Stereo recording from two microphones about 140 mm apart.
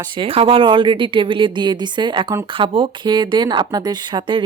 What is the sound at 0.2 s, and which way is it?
A woman's voice, 40° right (ahead or behind).